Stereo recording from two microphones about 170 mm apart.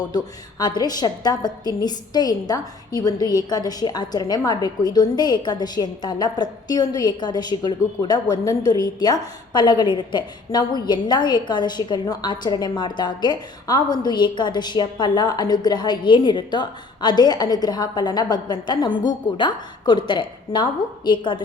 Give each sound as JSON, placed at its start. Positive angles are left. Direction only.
{"t": 0.6, "sound": "a woman's voice", "side_deg": 25}